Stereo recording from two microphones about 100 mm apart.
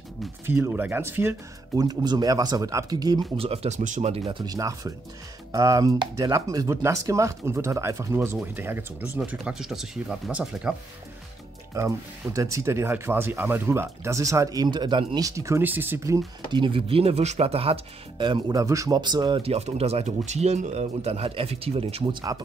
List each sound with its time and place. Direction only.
0.5 s speech: 20° right (ahead or behind)
1.8 s speech: 40° right (ahead or behind)
3.3 s speech: 80° right
4.5 s speech: 35° right (ahead or behind); by 9.4 s 15° right (ahead or behind)
9.4 s speech: 5° right (ahead or behind)
11.7 s speech: 30° right (ahead or behind); by 15.1 s 50° right (ahead or behind)
15.1 s speech: 35° right (ahead or behind)
15.6 s speech: 20° right (ahead or behind)
16.5 s speech: 60° right (ahead or behind); by 17.7 s 85° right
18.1 s speech: 55° right (ahead or behind)
18.5 s speech: 35° right (ahead or behind)
18.9 s speech: 45° right (ahead or behind)
19.4 s speech: 90° right; by 22.1 s 75° right (ahead or behind)